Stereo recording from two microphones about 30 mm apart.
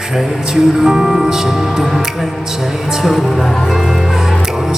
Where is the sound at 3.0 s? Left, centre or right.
Centre.